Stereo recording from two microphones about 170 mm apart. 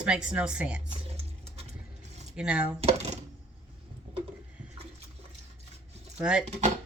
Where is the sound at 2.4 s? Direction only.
5° right (ahead or behind).